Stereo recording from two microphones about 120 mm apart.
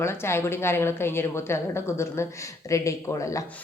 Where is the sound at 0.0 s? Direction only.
20° left (ahead or behind).